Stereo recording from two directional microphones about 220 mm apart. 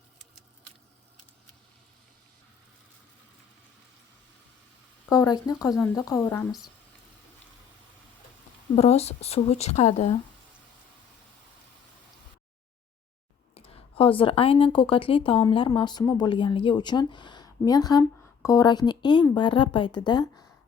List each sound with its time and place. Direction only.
5.0 s speech: 15° left (ahead or behind)
8.7 s speech: 30° left (ahead or behind)
13.5 s speech: 25° left (ahead or behind)